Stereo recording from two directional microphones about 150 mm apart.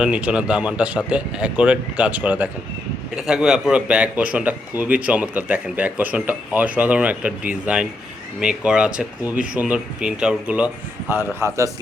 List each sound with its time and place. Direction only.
0.0 s speech: 5° right (ahead or behind)
11.3 s a man's voice: 20° right (ahead or behind)